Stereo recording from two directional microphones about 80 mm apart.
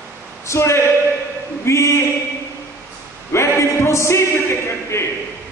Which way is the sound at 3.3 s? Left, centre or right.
Left.